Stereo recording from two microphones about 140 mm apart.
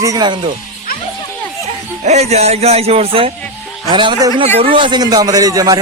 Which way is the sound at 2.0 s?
50° right (ahead or behind).